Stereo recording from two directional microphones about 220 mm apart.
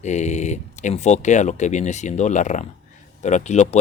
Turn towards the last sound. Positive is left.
turn(degrees=30)  # may be behind; listen again after turning